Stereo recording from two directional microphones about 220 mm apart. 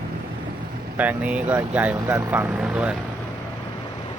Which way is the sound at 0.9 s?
5° right (ahead or behind).